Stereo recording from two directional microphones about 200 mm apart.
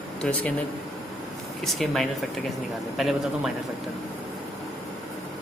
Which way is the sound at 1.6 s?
Centre (ahead or behind).